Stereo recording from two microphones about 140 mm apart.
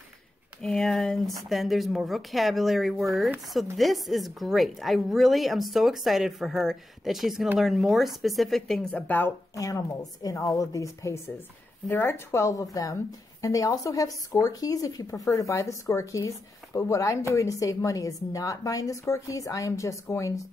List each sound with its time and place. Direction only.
0.6 s a woman's voice: 5° left (ahead or behind)
9.6 s speech: 25° left (ahead or behind)